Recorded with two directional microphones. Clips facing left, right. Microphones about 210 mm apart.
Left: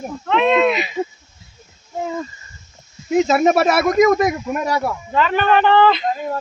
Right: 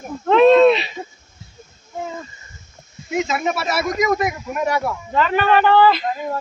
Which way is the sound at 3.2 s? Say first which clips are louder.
Left 7 dB; 40° left (ahead or behind).